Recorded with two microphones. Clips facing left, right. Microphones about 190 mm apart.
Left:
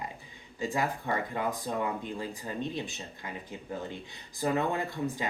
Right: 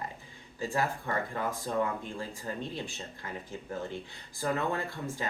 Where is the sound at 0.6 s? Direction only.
15° left (ahead or behind).